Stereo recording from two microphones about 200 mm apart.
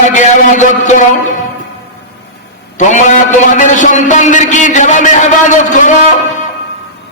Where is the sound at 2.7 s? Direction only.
35° left (ahead or behind).